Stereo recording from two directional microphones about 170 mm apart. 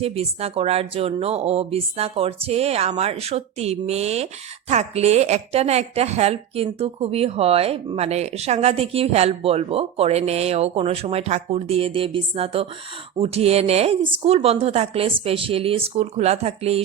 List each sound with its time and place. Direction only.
0.0 s speech: 35° right (ahead or behind)